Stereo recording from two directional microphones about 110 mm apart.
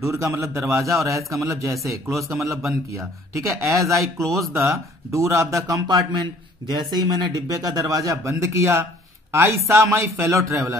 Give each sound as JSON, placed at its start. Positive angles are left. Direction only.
{"t": 0.0, "sound": "speech", "side_deg": -25}
{"t": 4.0, "sound": "speech", "side_deg": 0}
{"t": 4.6, "sound": "a man's voice", "side_deg": -30}